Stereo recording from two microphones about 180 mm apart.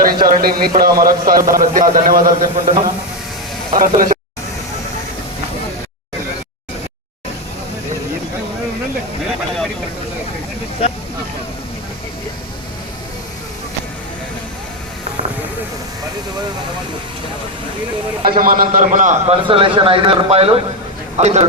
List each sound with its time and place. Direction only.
0.0 s a man's voice: 55° right (ahead or behind)
3.8 s a man's voice: 45° right (ahead or behind)
18.3 s a man's voice: 50° right (ahead or behind)